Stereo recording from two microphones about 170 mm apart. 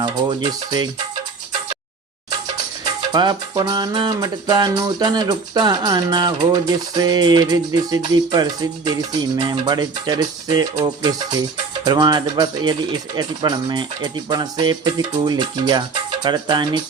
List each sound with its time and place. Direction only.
0.0 s music: 25° right (ahead or behind)
2.8 s music: 25° right (ahead or behind)